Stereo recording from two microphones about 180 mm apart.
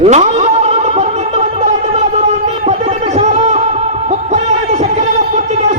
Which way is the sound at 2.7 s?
35° right (ahead or behind).